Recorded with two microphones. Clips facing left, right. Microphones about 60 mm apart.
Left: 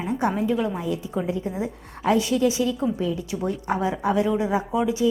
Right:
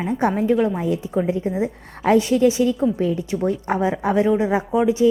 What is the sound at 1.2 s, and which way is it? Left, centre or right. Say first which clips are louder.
A woman's voice: right 5 dB; right.